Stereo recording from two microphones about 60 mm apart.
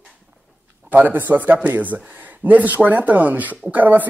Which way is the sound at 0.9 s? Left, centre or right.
Right.